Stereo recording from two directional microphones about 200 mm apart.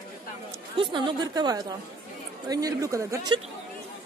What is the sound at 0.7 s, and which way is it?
A woman's voice, 25° right (ahead or behind).